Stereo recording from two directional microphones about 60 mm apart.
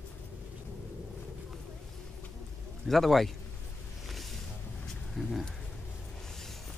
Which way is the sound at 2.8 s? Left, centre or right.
Centre.